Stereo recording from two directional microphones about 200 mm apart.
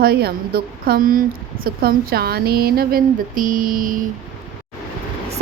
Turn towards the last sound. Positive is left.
turn(degrees=-45)  # may be behind; listen again after turning